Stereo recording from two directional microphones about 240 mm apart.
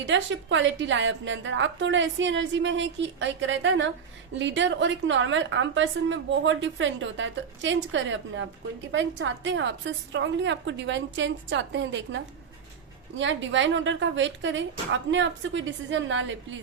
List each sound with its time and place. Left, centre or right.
0.0 s a woman's voice: right